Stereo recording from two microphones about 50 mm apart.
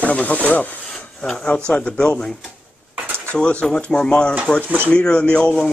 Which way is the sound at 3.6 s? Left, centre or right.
Centre.